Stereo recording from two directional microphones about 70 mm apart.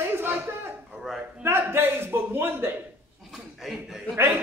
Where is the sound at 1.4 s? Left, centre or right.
Right.